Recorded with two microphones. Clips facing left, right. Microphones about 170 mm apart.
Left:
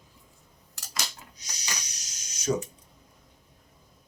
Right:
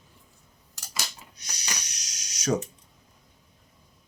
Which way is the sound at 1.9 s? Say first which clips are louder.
Right 2 dB; 85° right.